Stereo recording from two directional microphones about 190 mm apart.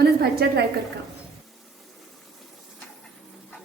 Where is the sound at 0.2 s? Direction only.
55° right (ahead or behind).